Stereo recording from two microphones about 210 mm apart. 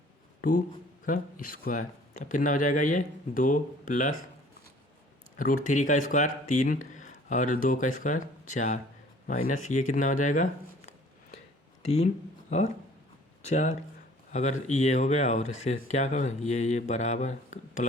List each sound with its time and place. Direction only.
1.5 s speech: 40° left (ahead or behind)
5.4 s speech: 40° left (ahead or behind)